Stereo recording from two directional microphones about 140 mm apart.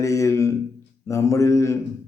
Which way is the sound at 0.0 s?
20° left (ahead or behind).